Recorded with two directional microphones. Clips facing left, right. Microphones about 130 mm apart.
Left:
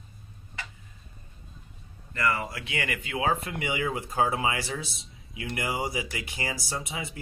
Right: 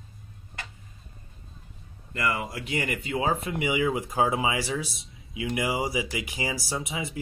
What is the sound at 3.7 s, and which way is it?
Speech, 15° right (ahead or behind).